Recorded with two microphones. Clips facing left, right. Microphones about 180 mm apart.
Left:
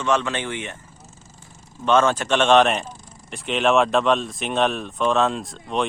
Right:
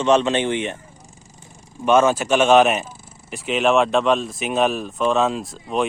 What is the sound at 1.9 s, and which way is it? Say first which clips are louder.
Speech: right 3 dB; 10° right (ahead or behind).